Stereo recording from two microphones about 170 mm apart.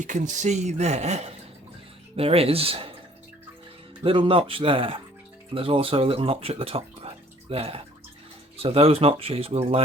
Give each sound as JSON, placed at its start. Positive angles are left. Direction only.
{"t": 0.0, "sound": "speech", "side_deg": -45}
{"t": 4.0, "sound": "speech", "side_deg": -30}